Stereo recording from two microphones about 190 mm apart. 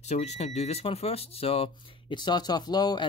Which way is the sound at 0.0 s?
35° left (ahead or behind).